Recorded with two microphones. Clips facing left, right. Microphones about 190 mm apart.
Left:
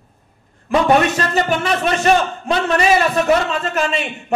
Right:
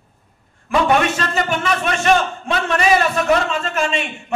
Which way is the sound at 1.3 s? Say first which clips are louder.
Left 2 dB; 35° left (ahead or behind).